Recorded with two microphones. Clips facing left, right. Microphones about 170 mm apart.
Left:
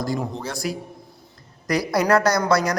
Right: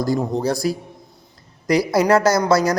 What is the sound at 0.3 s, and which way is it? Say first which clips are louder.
Speech: right 8 dB; 35° right (ahead or behind).